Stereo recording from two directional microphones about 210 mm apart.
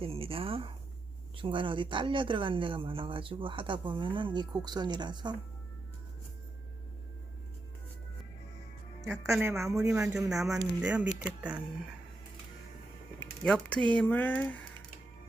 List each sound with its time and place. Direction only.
0.0 s speech: 25° right (ahead or behind)
9.0 s speech: 15° right (ahead or behind)
13.1 s speech: 5° left (ahead or behind)